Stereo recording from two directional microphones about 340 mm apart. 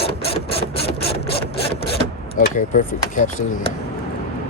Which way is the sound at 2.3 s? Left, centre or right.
Left.